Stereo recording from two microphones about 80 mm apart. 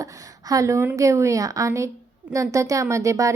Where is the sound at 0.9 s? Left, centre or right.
Right.